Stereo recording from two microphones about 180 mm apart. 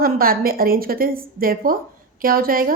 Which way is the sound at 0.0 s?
55° right (ahead or behind).